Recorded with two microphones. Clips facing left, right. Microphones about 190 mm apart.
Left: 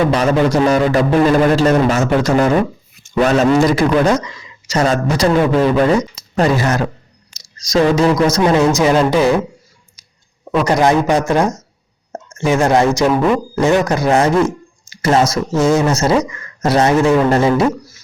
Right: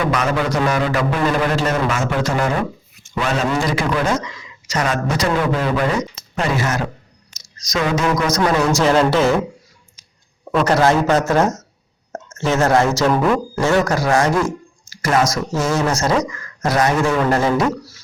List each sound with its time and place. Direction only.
0.0 s speech: 30° left (ahead or behind)
8.8 s a man's voice: 15° left (ahead or behind)
10.4 s a man's voice: 5° left (ahead or behind)
12.1 s drip: 10° left (ahead or behind)
13.0 s a man's voice: 5° left (ahead or behind)
13.6 s speech: 20° left (ahead or behind)